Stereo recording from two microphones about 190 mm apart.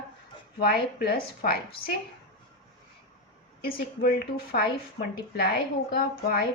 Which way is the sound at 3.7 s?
50° left (ahead or behind).